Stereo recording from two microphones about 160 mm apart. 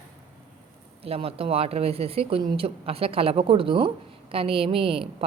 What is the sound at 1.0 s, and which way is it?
A woman's voice, 35° right (ahead or behind).